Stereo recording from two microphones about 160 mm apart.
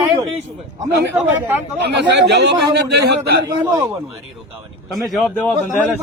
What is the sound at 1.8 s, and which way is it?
A man's voice, 90° right.